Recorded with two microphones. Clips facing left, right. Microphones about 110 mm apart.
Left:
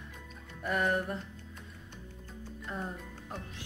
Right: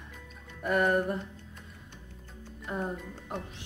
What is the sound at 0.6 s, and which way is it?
Music, 5° right (ahead or behind).